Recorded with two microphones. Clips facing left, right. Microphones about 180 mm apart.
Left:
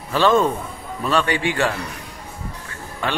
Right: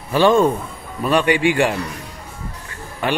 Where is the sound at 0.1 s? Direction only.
15° right (ahead or behind).